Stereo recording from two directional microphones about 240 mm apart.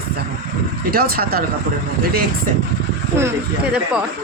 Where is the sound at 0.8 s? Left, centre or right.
Right.